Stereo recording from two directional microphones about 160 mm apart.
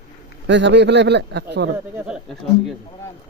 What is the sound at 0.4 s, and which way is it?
Speech, 90° right.